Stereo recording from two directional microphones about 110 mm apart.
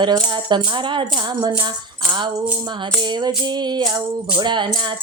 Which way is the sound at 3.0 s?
40° right (ahead or behind).